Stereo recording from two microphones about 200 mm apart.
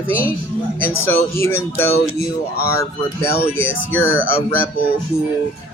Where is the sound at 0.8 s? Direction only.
10° left (ahead or behind).